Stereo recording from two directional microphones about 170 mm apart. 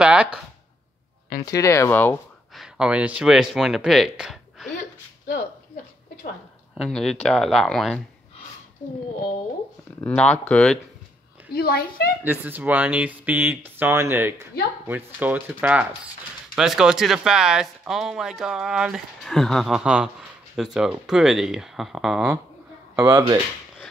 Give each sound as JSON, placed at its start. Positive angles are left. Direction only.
{"t": 0.0, "sound": "speech", "side_deg": -5}
{"t": 1.4, "sound": "speech", "side_deg": 20}
{"t": 2.5, "sound": "speech", "side_deg": -5}
{"t": 6.8, "sound": "speech", "side_deg": 0}
{"t": 9.9, "sound": "speech", "side_deg": 10}
{"t": 11.5, "sound": "a woman's voice", "side_deg": 65}
{"t": 12.2, "sound": "speech", "side_deg": -10}
{"t": 22.9, "sound": "speech", "side_deg": -15}